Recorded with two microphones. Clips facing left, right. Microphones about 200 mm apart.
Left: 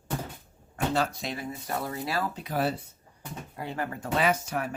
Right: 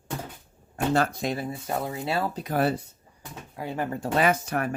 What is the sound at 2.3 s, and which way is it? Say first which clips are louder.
Speech: right 4 dB; 50° right (ahead or behind).